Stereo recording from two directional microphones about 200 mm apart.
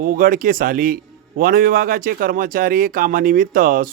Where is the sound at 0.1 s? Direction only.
45° right (ahead or behind).